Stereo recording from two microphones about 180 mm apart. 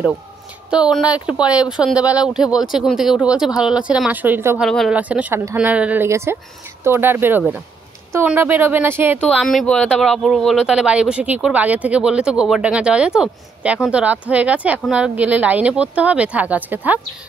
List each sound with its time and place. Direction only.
0.7 s speech: 5° right (ahead or behind)
4.6 s speech: centre (ahead or behind)
9.4 s speech: centre (ahead or behind)